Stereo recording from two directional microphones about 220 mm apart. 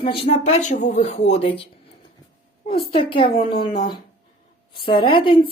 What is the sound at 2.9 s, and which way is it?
Speech, 25° left (ahead or behind).